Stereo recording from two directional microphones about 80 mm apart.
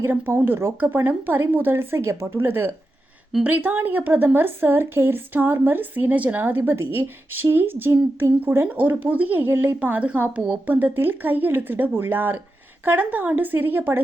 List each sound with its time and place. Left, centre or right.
0.0 s a woman's voice: right